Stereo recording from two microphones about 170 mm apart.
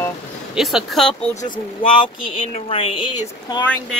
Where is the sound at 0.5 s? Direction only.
Centre (ahead or behind).